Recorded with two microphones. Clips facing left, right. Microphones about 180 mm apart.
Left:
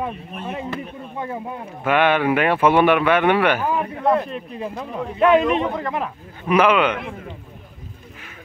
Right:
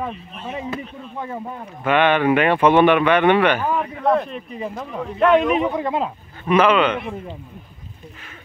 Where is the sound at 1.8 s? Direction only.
10° left (ahead or behind).